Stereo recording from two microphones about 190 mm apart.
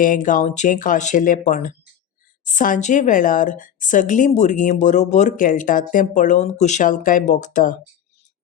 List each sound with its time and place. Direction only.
0.0 s a woman's voice: 45° left (ahead or behind)